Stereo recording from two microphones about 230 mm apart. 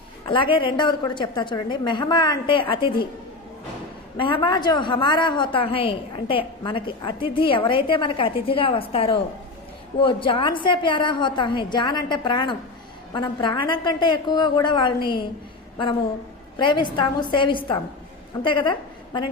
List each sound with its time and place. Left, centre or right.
0.3 s a woman's voice: left
4.2 s a woman's voice: left
16.6 s a woman's voice: left